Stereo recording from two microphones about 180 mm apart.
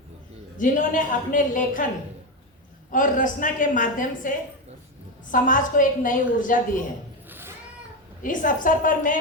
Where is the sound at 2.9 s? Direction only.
45° left (ahead or behind).